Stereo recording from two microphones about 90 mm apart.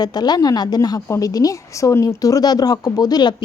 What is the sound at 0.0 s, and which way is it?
Speech, 50° left (ahead or behind).